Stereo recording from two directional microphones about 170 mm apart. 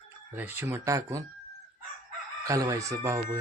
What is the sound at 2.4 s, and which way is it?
Speech, 20° right (ahead or behind).